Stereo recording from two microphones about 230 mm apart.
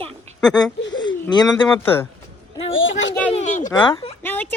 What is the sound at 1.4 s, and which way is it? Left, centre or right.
Speech, centre.